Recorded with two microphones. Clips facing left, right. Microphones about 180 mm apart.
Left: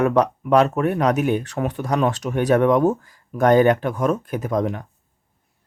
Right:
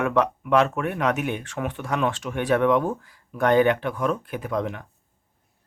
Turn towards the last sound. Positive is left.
turn(degrees=40)  # may be behind; listen again after turning